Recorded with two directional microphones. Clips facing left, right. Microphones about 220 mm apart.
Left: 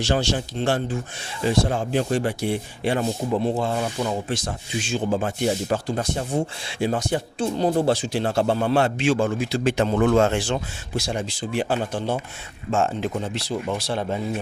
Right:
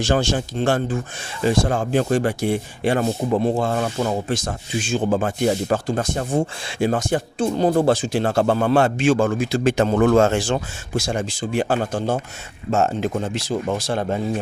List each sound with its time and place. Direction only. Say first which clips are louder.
0.0 s speech: right 3 dB; 50° right (ahead or behind)